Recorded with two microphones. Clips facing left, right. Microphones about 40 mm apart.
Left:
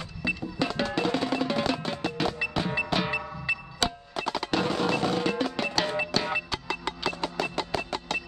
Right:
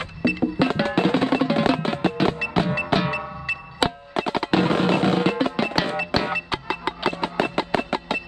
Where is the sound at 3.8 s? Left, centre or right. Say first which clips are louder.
Right 7 dB; right.